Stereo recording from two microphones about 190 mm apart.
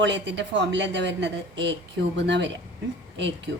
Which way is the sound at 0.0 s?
70° right (ahead or behind).